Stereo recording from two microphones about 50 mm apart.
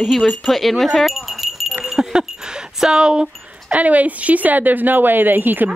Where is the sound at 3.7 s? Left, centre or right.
Right.